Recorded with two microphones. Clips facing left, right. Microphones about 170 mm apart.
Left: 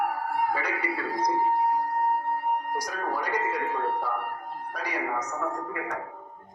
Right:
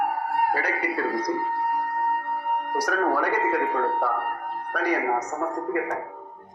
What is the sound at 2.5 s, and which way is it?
Speech, 65° right (ahead or behind).